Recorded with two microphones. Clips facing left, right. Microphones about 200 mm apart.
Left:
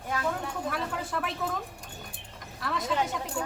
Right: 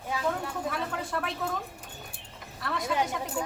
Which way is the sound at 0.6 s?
Centre (ahead or behind).